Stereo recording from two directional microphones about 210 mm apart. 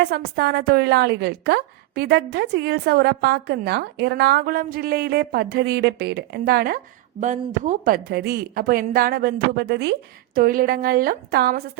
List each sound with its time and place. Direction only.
0.0 s a woman's voice: 50° right (ahead or behind)
7.2 s a woman's voice: 35° right (ahead or behind)